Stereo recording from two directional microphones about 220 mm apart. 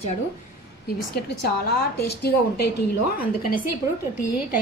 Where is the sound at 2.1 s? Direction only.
45° left (ahead or behind).